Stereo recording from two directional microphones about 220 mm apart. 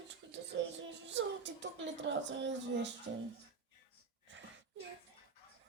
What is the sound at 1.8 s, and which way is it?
Speech, 55° right (ahead or behind).